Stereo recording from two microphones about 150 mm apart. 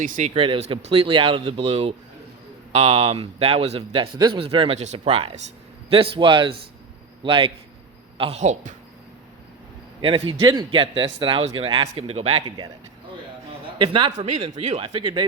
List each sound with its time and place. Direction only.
0.3 s speech: 40° right (ahead or behind)
8.2 s speech: 45° right (ahead or behind)
10.0 s speech: 35° right (ahead or behind)
12.5 s speech: 30° right (ahead or behind)
13.7 s speech: 30° right (ahead or behind)
14.3 s speech: 50° right (ahead or behind)
14.8 s speech: 35° right (ahead or behind)